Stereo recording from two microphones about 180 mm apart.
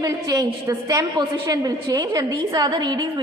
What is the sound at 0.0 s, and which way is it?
A woman's voice, 20° right (ahead or behind).